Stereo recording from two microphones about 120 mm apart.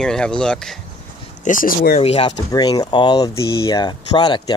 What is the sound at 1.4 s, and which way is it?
Speech, 90° left.